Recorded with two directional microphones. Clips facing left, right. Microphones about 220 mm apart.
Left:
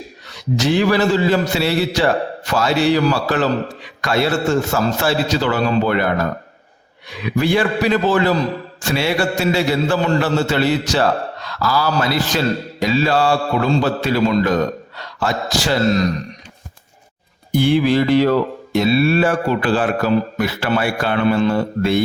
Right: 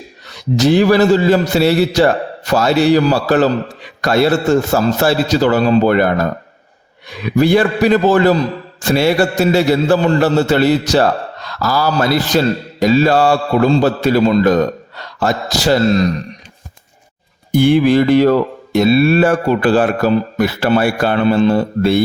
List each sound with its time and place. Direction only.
0.5 s a man's voice: 40° right (ahead or behind)
7.1 s a man's voice: 45° right (ahead or behind)
17.5 s speech: 50° right (ahead or behind); by 22.0 s 35° right (ahead or behind)